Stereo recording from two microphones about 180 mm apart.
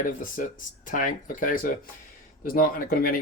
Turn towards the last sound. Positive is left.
turn(degrees=55)  # may be behind; listen again after turning